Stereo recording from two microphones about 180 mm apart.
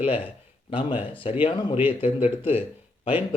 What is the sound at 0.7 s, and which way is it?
Speech, 25° left (ahead or behind).